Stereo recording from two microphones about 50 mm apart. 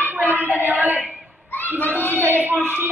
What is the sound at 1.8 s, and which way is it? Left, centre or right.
A woman's voice, right.